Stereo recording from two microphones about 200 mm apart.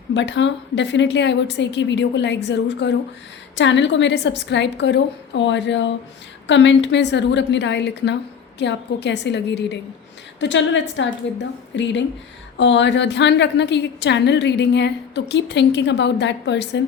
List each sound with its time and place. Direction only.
0.1 s a woman's voice: 65° left (ahead or behind)